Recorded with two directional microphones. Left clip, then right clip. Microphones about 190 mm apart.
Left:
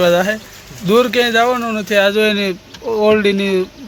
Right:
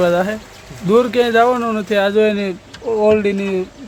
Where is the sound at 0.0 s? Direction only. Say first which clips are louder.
Left 2 dB; centre (ahead or behind).